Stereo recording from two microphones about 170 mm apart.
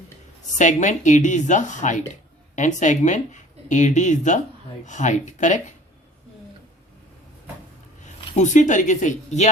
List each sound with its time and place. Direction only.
0.6 s speech: 45° left (ahead or behind)
8.2 s a sound: 30° left (ahead or behind)
8.4 s speech: 45° left (ahead or behind)